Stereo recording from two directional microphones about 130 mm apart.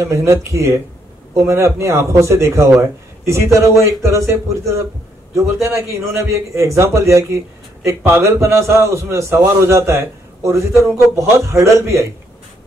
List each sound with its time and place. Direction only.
0.0 s a man's voice: 20° right (ahead or behind)
6.1 s a man's voice: 20° right (ahead or behind)